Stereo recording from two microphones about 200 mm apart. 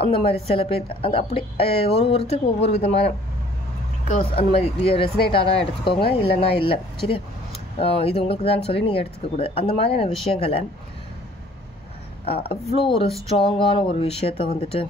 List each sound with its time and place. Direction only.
0.3 s speech: 30° left (ahead or behind)
4.1 s speech: 30° left (ahead or behind)
12.3 s speech: 30° left (ahead or behind)